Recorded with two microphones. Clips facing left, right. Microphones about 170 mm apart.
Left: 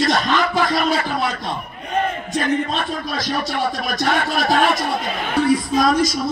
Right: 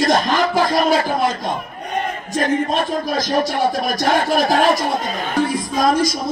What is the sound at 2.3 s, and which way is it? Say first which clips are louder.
Music: right 3 dB; 45° right (ahead or behind).